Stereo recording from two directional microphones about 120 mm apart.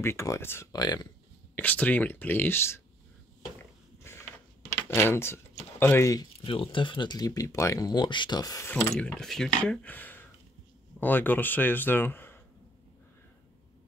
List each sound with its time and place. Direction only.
0.0 s speech: 25° left (ahead or behind)
0.7 s speech: 35° left (ahead or behind)
1.5 s speech: 15° left (ahead or behind)
4.1 s a sound: 20° left (ahead or behind)
4.6 s speech: 20° left (ahead or behind)
6.4 s speech: 50° left (ahead or behind); by 8.0 s 30° left (ahead or behind)
8.0 s speech: 40° left (ahead or behind)
8.7 s speech: 10° left (ahead or behind)